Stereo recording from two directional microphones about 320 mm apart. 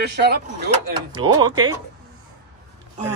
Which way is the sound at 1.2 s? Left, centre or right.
Centre.